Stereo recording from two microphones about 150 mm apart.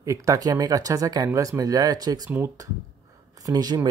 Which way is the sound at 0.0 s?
20° right (ahead or behind).